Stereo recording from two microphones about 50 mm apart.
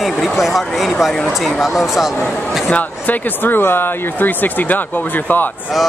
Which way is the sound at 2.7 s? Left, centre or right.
Left.